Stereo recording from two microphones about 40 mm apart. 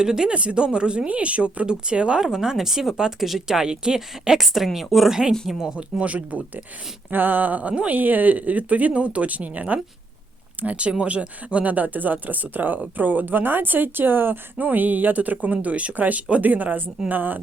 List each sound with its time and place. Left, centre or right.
0.0 s speech: centre
0.3 s speech: right
2.2 s speech: centre
5.5 s speech: centre
6.0 s speech: right
7.1 s speech: right
7.7 s speech: right
7.9 s speech: right
14.6 s speech: right